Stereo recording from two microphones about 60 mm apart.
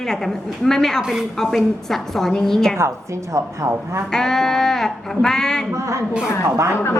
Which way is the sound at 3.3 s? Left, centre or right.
Right.